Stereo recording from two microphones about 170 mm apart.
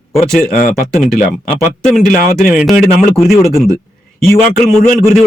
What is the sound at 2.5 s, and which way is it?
Speech, 10° right (ahead or behind).